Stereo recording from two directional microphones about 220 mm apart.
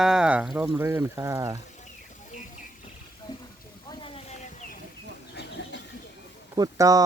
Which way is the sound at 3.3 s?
20° left (ahead or behind).